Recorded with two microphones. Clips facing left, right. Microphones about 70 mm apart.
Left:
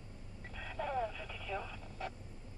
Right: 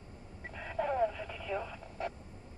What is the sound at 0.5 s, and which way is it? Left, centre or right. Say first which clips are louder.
Telephone: right 4 dB; right.